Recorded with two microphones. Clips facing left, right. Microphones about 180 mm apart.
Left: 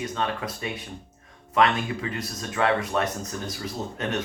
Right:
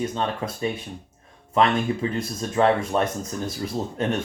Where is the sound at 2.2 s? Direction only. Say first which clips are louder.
Right 4 dB; 25° right (ahead or behind).